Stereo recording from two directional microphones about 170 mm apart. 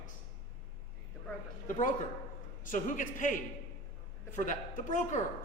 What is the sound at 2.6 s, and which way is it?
A man's voice, 50° left (ahead or behind).